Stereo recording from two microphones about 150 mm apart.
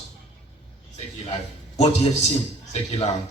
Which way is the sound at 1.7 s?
50° left (ahead or behind).